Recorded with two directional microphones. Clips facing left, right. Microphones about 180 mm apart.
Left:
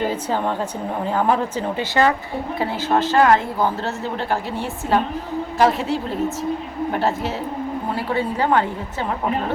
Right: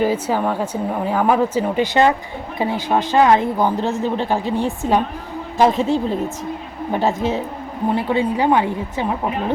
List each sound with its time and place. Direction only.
0.0 s speech: 10° right (ahead or behind)